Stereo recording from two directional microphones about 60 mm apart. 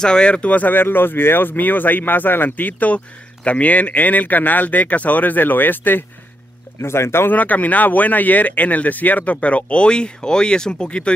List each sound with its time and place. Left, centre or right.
0.0 s speech: centre; by 6.0 s left
6.8 s speech: left
7.3 s speech: left